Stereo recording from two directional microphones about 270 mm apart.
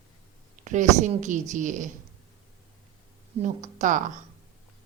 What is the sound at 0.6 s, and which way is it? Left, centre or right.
A woman's voice, right.